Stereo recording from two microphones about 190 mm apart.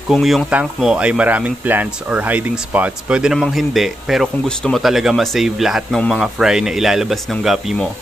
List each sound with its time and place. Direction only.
0.1 s speech: centre (ahead or behind)